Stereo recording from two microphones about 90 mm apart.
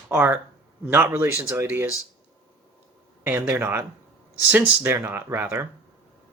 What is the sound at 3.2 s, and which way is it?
Speech, 25° right (ahead or behind).